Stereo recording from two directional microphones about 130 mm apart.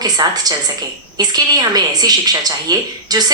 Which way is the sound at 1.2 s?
30° right (ahead or behind).